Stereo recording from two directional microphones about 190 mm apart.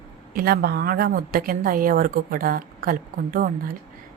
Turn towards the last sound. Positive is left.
turn(degrees=-50)  # may be behind; listen again after turning